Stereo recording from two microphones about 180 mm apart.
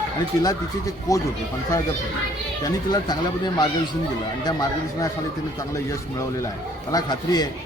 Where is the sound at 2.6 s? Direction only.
20° left (ahead or behind).